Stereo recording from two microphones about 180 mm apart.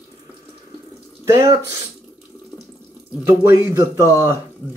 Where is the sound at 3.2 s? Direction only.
15° right (ahead or behind).